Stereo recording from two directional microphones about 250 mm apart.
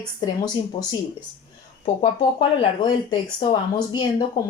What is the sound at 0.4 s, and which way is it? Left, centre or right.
Speech, centre.